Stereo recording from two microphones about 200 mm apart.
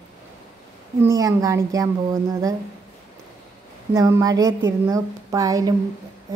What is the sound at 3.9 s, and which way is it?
A child's voice, 15° right (ahead or behind).